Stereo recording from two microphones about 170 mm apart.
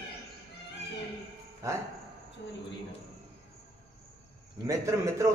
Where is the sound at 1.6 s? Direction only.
20° right (ahead or behind).